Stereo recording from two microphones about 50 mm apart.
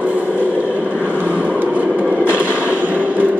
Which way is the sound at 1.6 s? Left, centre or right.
Right.